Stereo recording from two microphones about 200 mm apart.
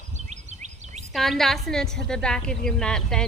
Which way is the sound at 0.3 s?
35° right (ahead or behind).